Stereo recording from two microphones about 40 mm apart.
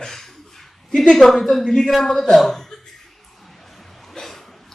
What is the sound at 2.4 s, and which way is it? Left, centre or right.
Chuckle, centre.